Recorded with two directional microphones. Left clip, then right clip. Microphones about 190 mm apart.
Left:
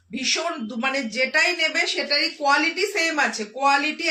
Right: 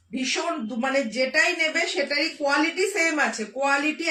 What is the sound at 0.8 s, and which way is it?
Speech, 15° left (ahead or behind).